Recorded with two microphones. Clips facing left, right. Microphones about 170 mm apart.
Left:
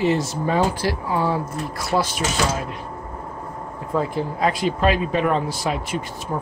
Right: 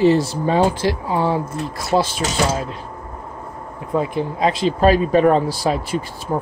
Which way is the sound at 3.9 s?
20° right (ahead or behind).